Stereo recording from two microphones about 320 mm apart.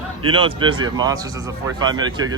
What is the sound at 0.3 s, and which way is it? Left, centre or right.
A man's voice, centre.